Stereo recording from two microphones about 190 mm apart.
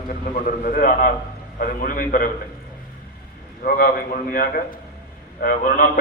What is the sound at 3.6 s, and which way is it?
A man's voice, 50° left (ahead or behind).